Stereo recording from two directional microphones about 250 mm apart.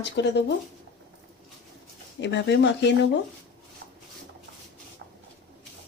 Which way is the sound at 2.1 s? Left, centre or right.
Left.